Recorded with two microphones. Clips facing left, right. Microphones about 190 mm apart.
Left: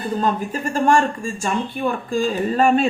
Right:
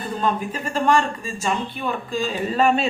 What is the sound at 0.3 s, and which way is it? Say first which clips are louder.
Speech: left 3 dB; 45° left (ahead or behind).